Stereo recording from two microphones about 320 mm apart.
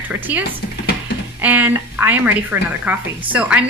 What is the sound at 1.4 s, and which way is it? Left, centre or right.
A woman's voice, centre.